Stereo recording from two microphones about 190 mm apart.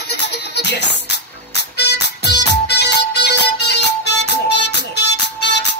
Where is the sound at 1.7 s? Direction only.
65° left (ahead or behind).